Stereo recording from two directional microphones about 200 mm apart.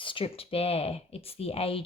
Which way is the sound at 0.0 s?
25° left (ahead or behind).